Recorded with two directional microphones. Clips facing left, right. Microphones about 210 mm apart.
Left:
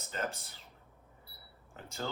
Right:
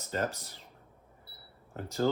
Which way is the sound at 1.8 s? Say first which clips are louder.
Right 11 dB; 40° right (ahead or behind).